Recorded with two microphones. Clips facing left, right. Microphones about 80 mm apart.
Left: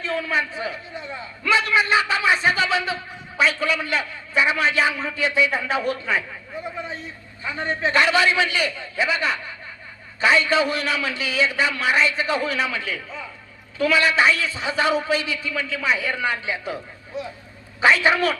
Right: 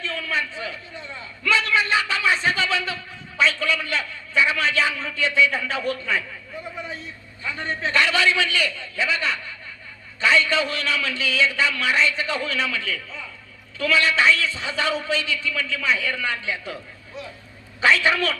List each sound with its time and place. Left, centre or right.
0.0 s a man's voice: left